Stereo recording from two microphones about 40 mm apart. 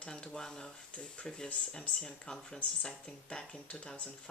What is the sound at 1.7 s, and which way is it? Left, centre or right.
Speech, left.